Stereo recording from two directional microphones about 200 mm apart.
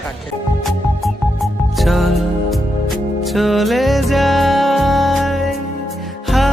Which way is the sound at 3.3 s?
Centre (ahead or behind).